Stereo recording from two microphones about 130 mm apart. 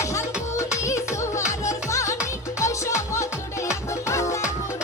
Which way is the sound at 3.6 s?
20° left (ahead or behind).